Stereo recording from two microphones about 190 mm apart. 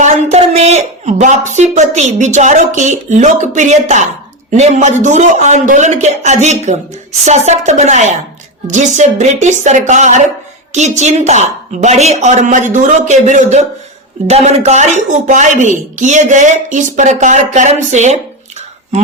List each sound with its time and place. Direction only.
0.0 s a woman's voice: 35° right (ahead or behind)